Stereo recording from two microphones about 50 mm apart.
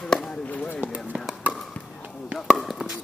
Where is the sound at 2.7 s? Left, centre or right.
Centre.